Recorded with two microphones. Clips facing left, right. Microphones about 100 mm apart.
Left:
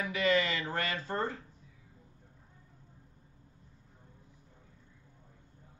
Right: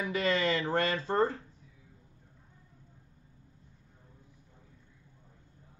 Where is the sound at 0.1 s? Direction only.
35° right (ahead or behind).